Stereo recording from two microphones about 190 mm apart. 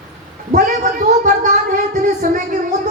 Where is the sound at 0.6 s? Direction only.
45° right (ahead or behind).